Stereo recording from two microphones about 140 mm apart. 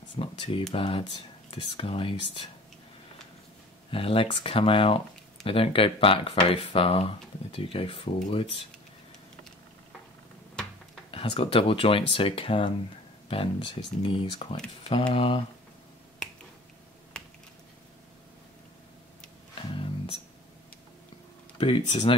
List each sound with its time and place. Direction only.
0.2 s speech: 40° left (ahead or behind)
3.9 s speech: 40° left (ahead or behind)
11.1 s speech: 40° left (ahead or behind)
17.1 s typing: 5° left (ahead or behind)
19.7 s music: 40° left (ahead or behind)
21.5 s speech: 45° left (ahead or behind)